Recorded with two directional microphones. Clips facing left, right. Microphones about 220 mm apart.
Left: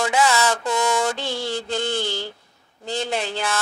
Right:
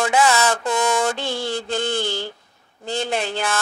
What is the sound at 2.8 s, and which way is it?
Speech, 55° right (ahead or behind).